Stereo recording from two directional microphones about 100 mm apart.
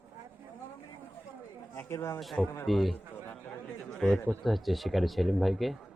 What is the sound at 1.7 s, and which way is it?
Speech, 25° left (ahead or behind).